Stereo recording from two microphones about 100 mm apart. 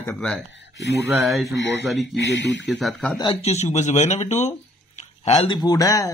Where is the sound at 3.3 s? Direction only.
90° left.